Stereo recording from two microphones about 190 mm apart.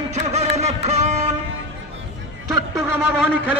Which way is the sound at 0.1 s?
35° right (ahead or behind).